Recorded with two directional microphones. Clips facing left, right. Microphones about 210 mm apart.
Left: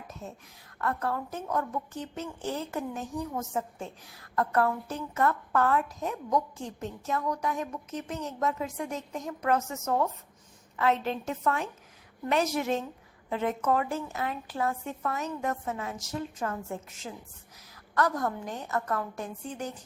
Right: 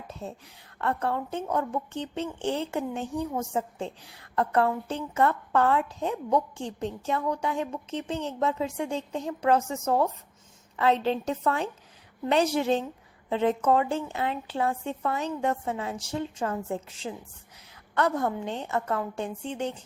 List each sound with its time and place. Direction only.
0.1 s a woman's voice: 30° right (ahead or behind)